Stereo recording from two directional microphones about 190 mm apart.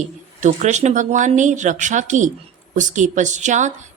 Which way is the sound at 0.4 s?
40° right (ahead or behind).